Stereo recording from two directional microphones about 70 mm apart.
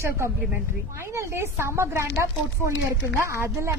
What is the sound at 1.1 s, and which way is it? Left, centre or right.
A woman's voice, right.